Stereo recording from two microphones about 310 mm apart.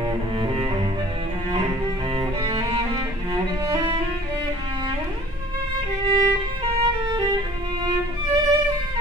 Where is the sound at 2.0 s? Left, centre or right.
Centre.